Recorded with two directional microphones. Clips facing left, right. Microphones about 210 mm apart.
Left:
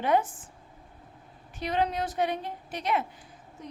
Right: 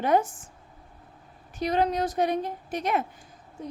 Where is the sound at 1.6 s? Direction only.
40° right (ahead or behind).